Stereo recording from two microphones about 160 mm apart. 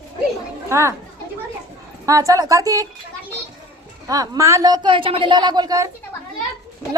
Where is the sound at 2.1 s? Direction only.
20° right (ahead or behind).